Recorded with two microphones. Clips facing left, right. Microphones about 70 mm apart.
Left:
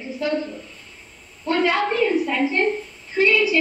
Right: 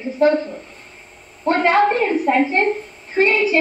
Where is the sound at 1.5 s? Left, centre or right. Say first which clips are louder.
Right 5 dB; right.